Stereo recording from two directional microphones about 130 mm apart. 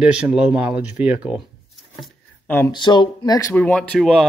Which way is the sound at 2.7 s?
35° left (ahead or behind).